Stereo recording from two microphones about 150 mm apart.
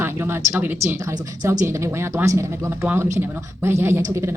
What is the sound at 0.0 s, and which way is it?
Speech, 15° right (ahead or behind).